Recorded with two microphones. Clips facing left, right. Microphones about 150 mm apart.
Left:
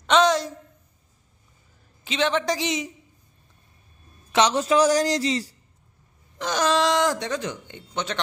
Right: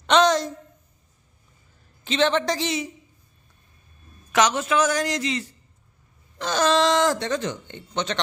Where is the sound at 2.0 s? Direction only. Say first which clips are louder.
Right 2 dB; 10° left (ahead or behind).